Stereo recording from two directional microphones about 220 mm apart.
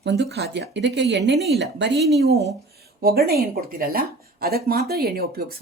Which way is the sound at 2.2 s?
45° right (ahead or behind).